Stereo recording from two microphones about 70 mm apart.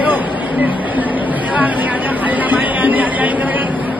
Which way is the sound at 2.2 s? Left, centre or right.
Right.